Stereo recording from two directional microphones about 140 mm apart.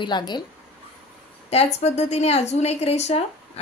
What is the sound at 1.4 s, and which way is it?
A woman's voice, 50° left (ahead or behind).